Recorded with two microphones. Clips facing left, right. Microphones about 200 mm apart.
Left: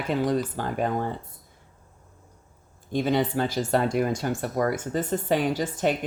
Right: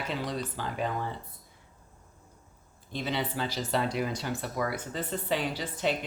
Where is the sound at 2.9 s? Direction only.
50° left (ahead or behind).